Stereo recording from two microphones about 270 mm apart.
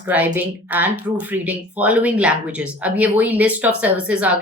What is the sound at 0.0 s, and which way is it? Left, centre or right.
Speech, centre.